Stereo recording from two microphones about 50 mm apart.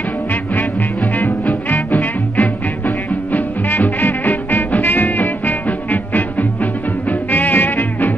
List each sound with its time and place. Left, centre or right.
0.3 s music: left